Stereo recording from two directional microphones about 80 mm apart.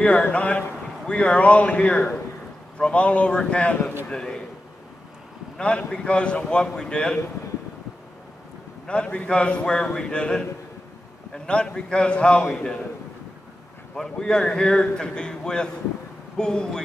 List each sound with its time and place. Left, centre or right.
0.0 s a man's voice: centre
5.6 s a man's voice: centre
8.8 s a man's voice: centre
13.9 s a man's voice: centre